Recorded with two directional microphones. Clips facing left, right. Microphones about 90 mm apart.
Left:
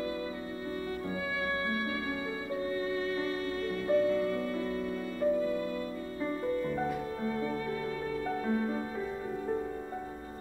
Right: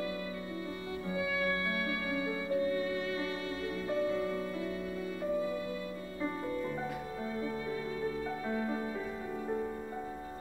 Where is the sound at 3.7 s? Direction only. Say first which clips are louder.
Left 6 dB; 55° left (ahead or behind).